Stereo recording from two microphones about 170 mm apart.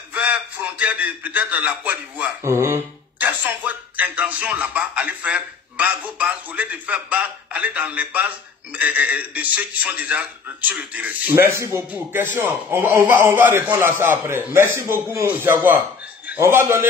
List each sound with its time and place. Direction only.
0.1 s a man's voice: 10° right (ahead or behind)